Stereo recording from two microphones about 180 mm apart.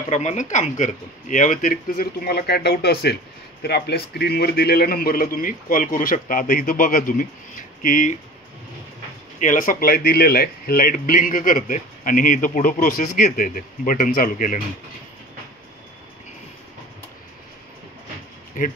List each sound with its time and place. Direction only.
0.1 s speech: 40° left (ahead or behind)
9.4 s speech: 45° left (ahead or behind)
18.6 s speech: 45° left (ahead or behind)